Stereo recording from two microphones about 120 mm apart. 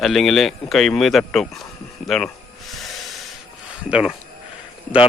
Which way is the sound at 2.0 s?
Centre (ahead or behind).